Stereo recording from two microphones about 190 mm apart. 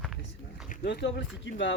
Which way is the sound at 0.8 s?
65° left (ahead or behind).